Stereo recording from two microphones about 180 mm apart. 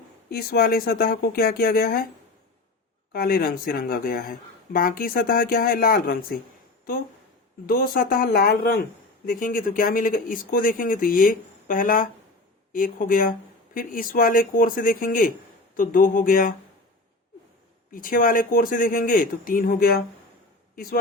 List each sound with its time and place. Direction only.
0.3 s speech: 60° left (ahead or behind)
3.1 s speech: 55° left (ahead or behind)
7.7 s speech: 55° left (ahead or behind)
9.3 s speech: 50° left (ahead or behind)
17.9 s speech: 50° left (ahead or behind)